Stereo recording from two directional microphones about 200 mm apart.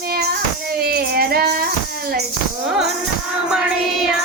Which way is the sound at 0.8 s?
50° right (ahead or behind).